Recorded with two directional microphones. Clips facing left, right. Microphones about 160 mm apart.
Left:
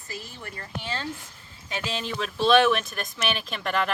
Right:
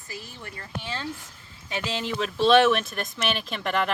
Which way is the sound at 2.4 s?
25° right (ahead or behind).